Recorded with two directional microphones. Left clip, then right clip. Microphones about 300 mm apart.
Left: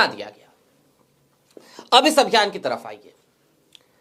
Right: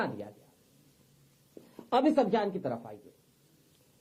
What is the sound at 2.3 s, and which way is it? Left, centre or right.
Speech, centre.